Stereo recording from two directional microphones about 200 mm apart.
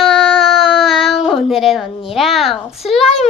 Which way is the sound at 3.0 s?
30° left (ahead or behind).